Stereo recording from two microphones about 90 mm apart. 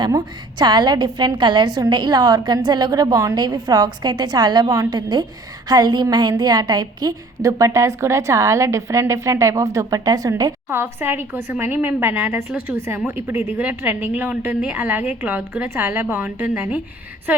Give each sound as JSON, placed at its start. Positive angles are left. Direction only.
{"t": 0.6, "sound": "a woman's voice", "side_deg": -55}
{"t": 10.7, "sound": "a woman's voice", "side_deg": -25}